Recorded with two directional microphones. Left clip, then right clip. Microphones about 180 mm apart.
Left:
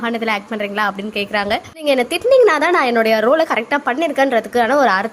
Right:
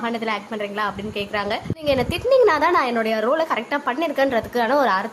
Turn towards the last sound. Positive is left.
turn(degrees=20)  # may be behind; listen again after turning